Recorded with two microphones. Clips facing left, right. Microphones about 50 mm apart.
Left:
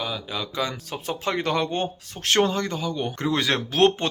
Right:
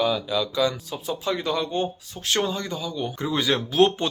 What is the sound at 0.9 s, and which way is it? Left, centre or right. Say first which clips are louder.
Speech: even; left.